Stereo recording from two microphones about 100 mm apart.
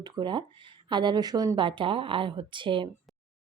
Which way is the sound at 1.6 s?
55° right (ahead or behind).